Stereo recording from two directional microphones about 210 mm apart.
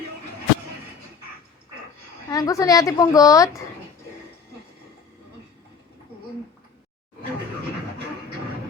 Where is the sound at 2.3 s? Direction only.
15° left (ahead or behind).